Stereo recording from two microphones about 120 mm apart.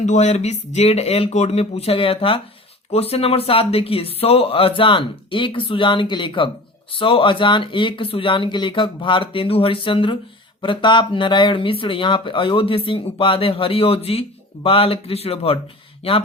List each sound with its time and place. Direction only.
0.0 s speech: 80° left; by 15.5 s 55° left (ahead or behind)